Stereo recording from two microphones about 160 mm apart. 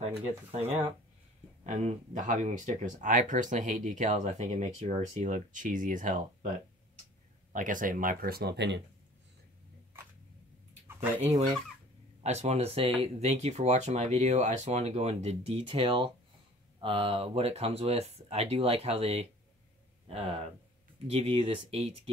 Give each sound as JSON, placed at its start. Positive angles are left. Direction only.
{"t": 0.5, "sound": "speech", "side_deg": -40}
{"t": 7.5, "sound": "speech", "side_deg": -55}
{"t": 12.2, "sound": "speech", "side_deg": -40}